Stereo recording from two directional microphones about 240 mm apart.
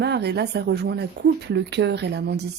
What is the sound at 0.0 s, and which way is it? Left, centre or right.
A woman's voice, right.